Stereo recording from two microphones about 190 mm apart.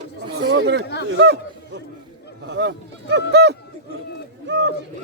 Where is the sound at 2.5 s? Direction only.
65° right (ahead or behind).